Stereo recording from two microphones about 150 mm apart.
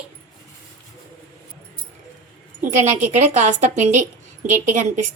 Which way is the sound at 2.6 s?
55° right (ahead or behind).